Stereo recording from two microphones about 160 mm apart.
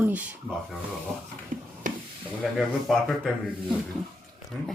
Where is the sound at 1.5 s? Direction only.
55° right (ahead or behind).